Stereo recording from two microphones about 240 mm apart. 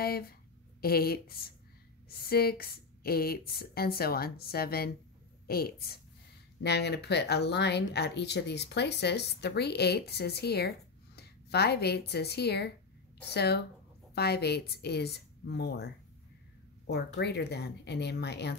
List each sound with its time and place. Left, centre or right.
0.0 s speech: left